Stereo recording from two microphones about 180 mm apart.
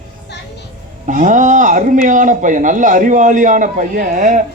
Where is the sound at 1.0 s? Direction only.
45° right (ahead or behind).